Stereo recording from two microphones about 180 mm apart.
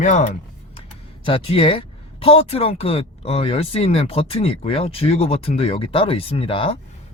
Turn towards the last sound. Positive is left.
turn(degrees=30)  # may be behind; listen again after turning